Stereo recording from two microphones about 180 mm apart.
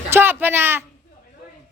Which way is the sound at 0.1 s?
10° right (ahead or behind).